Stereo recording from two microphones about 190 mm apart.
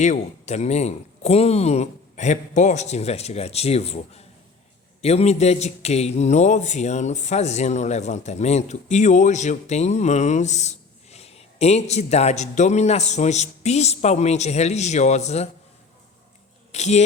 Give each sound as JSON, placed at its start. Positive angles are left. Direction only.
{"t": 0.0, "sound": "speech", "side_deg": 40}
{"t": 16.7, "sound": "speech", "side_deg": 35}